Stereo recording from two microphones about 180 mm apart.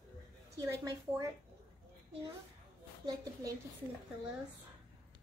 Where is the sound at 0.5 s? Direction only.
20° right (ahead or behind).